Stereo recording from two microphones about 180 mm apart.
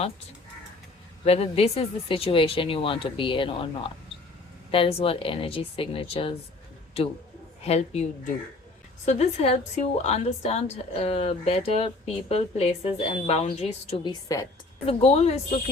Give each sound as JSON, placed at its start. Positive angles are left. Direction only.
{"t": 1.2, "sound": "speech", "side_deg": 35}
{"t": 9.0, "sound": "speech", "side_deg": 35}
{"t": 14.0, "sound": "a woman's voice", "side_deg": 20}
{"t": 14.8, "sound": "speech", "side_deg": 35}